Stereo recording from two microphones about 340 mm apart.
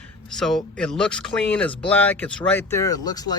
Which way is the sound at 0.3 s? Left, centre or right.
Centre.